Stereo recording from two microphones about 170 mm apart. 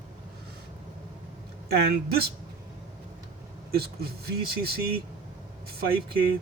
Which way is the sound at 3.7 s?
65° right (ahead or behind).